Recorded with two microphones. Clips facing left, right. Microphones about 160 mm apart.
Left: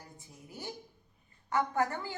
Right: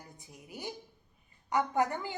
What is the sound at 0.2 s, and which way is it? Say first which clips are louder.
A woman's voice: right 3 dB; 15° right (ahead or behind).